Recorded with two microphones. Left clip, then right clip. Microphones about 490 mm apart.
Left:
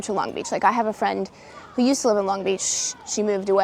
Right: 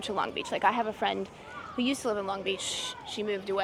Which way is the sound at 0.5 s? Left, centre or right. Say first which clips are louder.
Left 7 dB; left.